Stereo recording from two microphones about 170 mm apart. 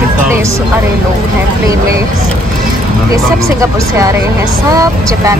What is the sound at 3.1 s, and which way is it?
Speech, 20° right (ahead or behind).